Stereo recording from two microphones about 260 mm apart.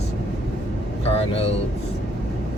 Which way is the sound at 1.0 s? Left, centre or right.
Left.